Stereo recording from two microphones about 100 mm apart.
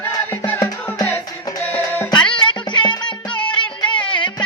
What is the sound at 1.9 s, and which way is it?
Music, 15° left (ahead or behind).